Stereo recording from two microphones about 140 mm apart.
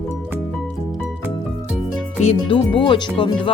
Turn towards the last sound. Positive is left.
turn(degrees=35)  # may be behind; listen again after turning